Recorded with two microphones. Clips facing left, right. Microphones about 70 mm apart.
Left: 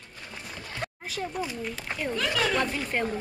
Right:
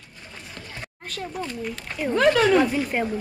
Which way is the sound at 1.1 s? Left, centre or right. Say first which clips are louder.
Right 2 dB; centre.